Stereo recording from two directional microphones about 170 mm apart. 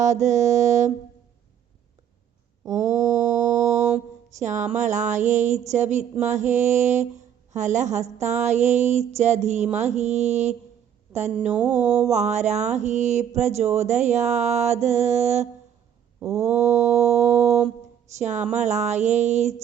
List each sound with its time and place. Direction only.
0.0 s mantra: 45° right (ahead or behind)
2.7 s mantra: 45° right (ahead or behind)
11.1 s speech: 40° right (ahead or behind)
11.5 s a sound: 10° right (ahead or behind)
12.1 s speech: 40° right (ahead or behind)
16.2 s a sound: 15° right (ahead or behind)
16.9 s speech: 40° right (ahead or behind)
18.2 s mantra: 45° right (ahead or behind)